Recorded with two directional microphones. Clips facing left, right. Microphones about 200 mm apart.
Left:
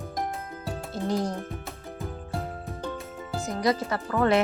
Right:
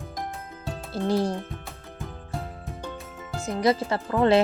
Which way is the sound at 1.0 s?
30° right (ahead or behind).